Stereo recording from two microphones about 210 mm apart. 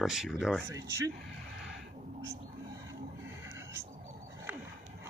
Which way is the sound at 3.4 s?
10° right (ahead or behind).